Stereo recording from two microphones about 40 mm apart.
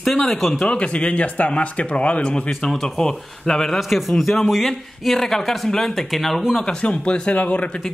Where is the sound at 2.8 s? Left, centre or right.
Centre.